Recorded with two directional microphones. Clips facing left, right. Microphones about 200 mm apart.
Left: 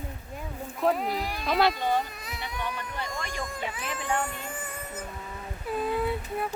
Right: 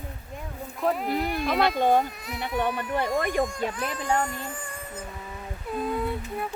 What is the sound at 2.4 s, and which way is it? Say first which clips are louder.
Speech: right 8 dB; 55° right (ahead or behind).